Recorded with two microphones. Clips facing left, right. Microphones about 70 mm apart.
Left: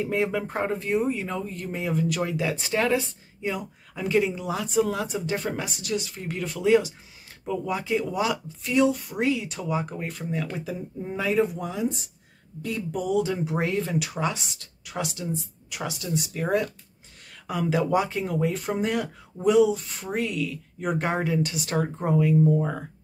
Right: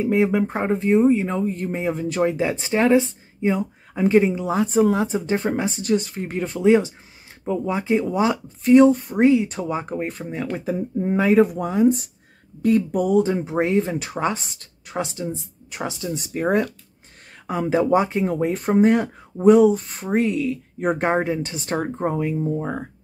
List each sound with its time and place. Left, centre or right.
0.0 s speech: centre; by 6.3 s right
6.3 s speech: right